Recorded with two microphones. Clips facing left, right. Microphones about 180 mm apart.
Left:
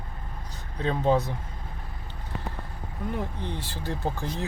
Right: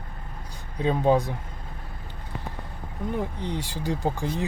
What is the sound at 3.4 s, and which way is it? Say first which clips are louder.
Speech: right 4 dB; 15° right (ahead or behind).